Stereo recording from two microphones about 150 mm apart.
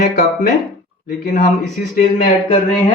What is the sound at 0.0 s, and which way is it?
Speech, 60° left (ahead or behind).